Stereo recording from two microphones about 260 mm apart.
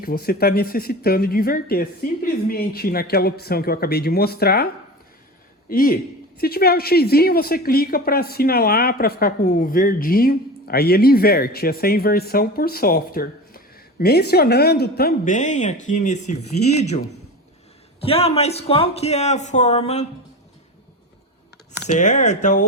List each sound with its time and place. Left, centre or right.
0.0 s a woman's voice: left
18.0 s speech: left
21.9 s speech: left